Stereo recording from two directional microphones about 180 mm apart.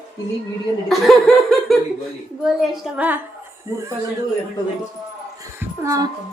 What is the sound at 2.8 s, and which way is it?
Speech, 10° right (ahead or behind).